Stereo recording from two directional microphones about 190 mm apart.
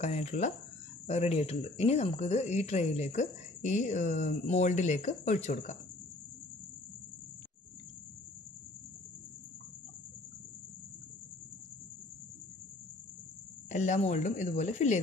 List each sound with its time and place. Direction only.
0.0 s speech: 35° left (ahead or behind)
13.7 s speech: 40° left (ahead or behind)